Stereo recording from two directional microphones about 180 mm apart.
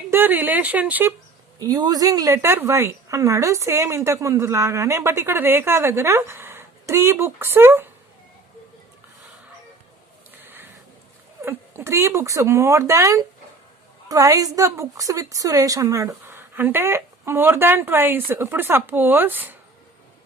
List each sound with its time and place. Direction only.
0.1 s a woman's voice: 10° right (ahead or behind)
1.5 s a woman's voice: 20° right (ahead or behind)
10.4 s a sound: 10° right (ahead or behind)
11.4 s a woman's voice: 15° right (ahead or behind)